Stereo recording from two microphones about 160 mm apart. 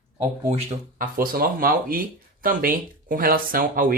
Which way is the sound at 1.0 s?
65° right (ahead or behind).